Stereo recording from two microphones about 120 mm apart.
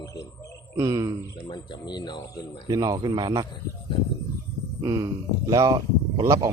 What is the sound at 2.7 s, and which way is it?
Speech, 30° right (ahead or behind).